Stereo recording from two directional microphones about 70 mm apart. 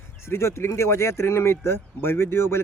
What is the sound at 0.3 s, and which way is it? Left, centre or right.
Speech, left.